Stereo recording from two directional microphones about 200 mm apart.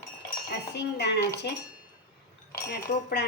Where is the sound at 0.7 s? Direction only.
55° left (ahead or behind).